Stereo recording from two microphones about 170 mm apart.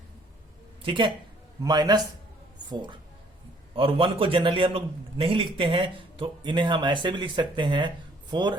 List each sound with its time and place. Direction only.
0.8 s a man's voice: 30° right (ahead or behind)